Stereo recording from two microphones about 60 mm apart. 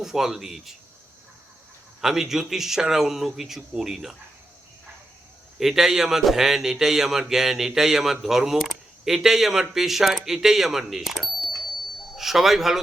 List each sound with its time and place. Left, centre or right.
0.0 s a man's voice: centre
2.0 s a man's voice: centre
5.5 s a man's voice: centre